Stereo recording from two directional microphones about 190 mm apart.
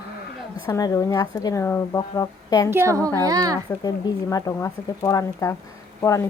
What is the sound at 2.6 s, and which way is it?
Speech, 15° right (ahead or behind).